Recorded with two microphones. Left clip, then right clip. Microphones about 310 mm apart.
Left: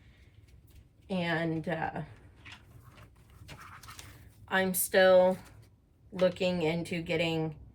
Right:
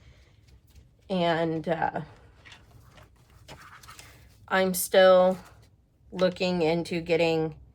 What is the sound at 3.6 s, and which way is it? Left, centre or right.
Dog, centre.